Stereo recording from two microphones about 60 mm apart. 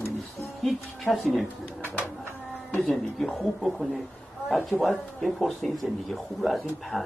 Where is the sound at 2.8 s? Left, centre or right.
Centre.